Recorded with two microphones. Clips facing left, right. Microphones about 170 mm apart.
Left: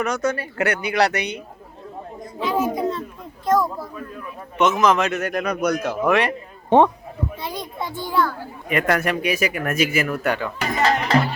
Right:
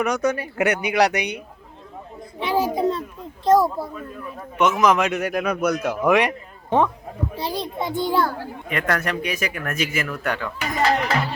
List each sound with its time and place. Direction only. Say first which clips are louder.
0.0 s speech: right 1 dB; 15° right (ahead or behind)
2.6 s speech: right 2 dB; 30° right (ahead or behind)
4.5 s speech: even; 10° right (ahead or behind)
6.7 s speech: left 5 dB; 30° left (ahead or behind)
7.3 s a child's voice: right 4 dB; 30° right (ahead or behind)
7.8 s speech: right 3 dB; 20° right (ahead or behind)
8.7 s speech: left 4 dB; 10° left (ahead or behind)
10.6 s speech: right 1 dB; 35° left (ahead or behind)